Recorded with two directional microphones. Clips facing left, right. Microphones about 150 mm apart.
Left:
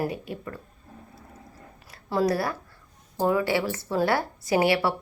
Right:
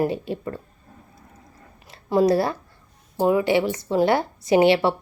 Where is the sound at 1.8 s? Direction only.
20° right (ahead or behind).